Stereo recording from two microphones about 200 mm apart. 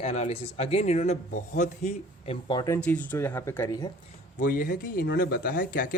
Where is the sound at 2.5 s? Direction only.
20° left (ahead or behind).